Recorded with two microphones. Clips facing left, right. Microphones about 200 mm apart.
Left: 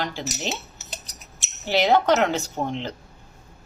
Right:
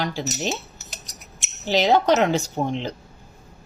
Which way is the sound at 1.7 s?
15° right (ahead or behind).